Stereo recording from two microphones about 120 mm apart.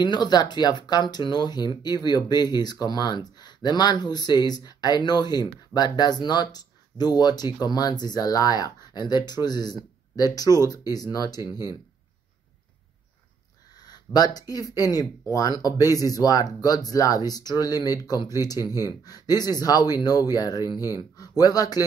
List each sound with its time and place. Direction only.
0.0 s speech: 35° left (ahead or behind)
13.8 s a sound: 35° left (ahead or behind)
14.5 s speech: 30° left (ahead or behind)